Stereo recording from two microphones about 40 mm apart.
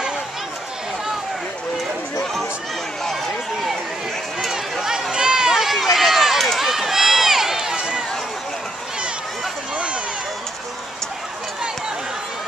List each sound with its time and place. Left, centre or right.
4.4 s run: centre
5.5 s run: centre
7.7 s run: right